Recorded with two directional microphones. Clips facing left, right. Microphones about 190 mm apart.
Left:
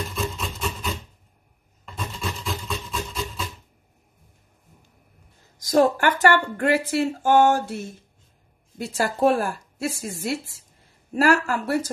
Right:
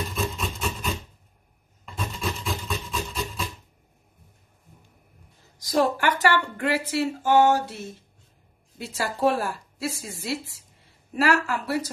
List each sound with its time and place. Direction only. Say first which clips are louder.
0.1 s a sound: even; centre (ahead or behind)
2.0 s wood: right 1 dB; centre (ahead or behind)
5.7 s speech: left 4 dB; 50° left (ahead or behind)